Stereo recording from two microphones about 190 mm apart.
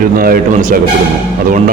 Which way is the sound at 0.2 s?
50° right (ahead or behind).